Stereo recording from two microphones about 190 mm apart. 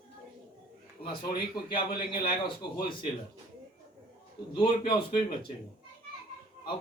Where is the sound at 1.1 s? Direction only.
55° left (ahead or behind).